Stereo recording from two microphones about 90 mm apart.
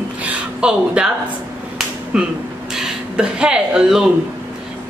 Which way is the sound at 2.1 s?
10° right (ahead or behind).